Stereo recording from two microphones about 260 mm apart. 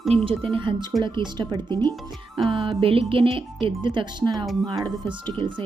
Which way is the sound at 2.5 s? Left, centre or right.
Centre.